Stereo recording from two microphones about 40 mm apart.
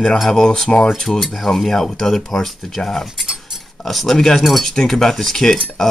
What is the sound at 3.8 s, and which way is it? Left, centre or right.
Speech, centre.